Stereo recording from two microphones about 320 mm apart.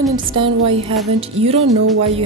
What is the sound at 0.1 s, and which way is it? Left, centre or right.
Speech, centre.